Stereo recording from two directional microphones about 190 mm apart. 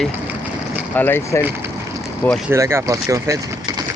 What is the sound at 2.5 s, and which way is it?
Speech, 15° right (ahead or behind).